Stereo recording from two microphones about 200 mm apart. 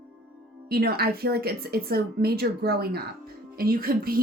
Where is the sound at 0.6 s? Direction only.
50° right (ahead or behind).